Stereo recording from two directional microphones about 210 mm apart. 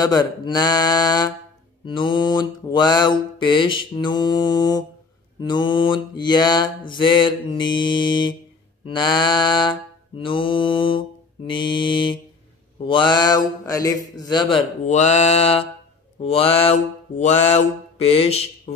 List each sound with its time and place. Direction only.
0.0 s mantra: 20° left (ahead or behind)
14.9 s mantra: 35° left (ahead or behind)